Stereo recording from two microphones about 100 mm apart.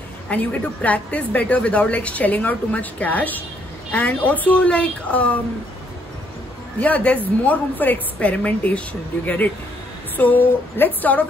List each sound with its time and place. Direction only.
0.3 s a woman's voice: 15° left (ahead or behind)
6.8 s a woman's voice: 15° left (ahead or behind)